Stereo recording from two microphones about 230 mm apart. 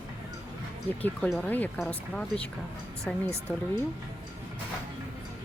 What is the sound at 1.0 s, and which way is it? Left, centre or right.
Speech, centre.